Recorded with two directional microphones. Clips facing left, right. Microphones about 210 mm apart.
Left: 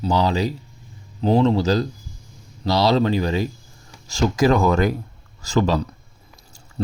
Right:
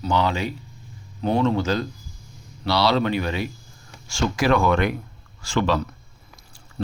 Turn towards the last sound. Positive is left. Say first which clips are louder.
# left 4 dB
turn(degrees=40)  # may be behind; listen again after turning